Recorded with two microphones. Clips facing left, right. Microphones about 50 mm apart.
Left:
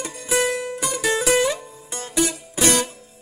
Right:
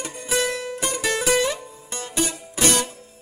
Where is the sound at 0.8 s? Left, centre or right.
Right.